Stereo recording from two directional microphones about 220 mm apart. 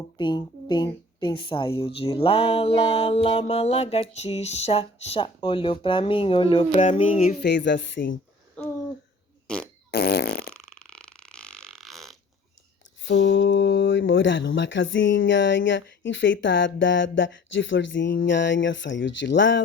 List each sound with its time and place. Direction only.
0.2 s a woman's voice: 20° left (ahead or behind)
6.7 s a sound: 30° left (ahead or behind)
7.4 s a woman's voice: 50° left (ahead or behind)
9.5 s fart: 5° left (ahead or behind)
9.9 s fart: 45° left (ahead or behind)
10.8 s fart: 5° left (ahead or behind)
13.1 s speech: 55° left (ahead or behind)